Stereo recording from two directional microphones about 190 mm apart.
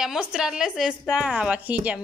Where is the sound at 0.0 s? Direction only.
5° right (ahead or behind).